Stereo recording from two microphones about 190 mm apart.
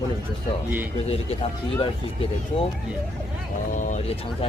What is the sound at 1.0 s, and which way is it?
Speech, 30° left (ahead or behind).